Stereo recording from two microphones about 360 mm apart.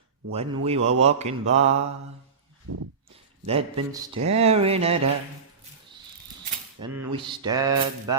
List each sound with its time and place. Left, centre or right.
0.3 s speech: centre
3.4 s speech: centre
6.7 s speech: centre